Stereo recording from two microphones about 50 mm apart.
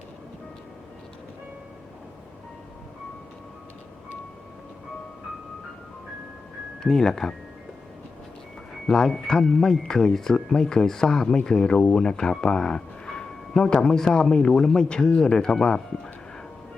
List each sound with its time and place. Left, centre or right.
6.8 s speech: centre
8.7 s speech: centre